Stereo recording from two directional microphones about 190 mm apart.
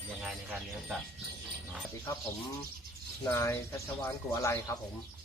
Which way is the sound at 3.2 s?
15° left (ahead or behind).